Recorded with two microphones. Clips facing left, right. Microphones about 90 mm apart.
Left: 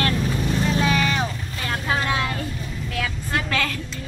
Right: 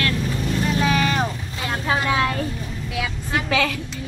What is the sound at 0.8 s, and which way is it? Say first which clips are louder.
Vehicle: right 2 dB; 5° right (ahead or behind).